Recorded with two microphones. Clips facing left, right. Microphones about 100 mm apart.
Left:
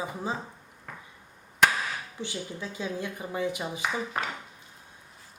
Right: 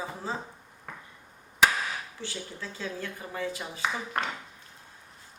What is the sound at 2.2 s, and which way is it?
Speech, 15° left (ahead or behind).